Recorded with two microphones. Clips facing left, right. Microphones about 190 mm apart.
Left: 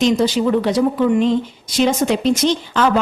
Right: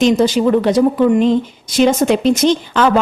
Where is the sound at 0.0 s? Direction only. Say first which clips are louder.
Right 3 dB; 50° right (ahead or behind).